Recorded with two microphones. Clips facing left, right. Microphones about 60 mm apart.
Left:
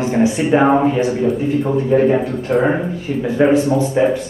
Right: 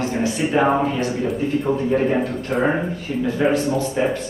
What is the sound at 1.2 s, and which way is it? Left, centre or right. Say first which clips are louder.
Speech: left 4 dB; centre.